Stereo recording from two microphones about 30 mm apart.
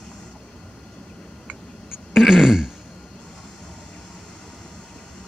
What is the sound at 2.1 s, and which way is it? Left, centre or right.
Throat clearing, centre.